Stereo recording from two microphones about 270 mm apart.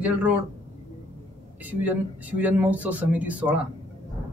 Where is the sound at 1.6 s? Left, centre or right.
Centre.